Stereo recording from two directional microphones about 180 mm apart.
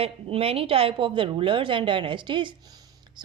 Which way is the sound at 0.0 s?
30° right (ahead or behind).